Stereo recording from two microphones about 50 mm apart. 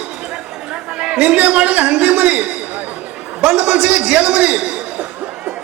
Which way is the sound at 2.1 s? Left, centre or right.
Centre.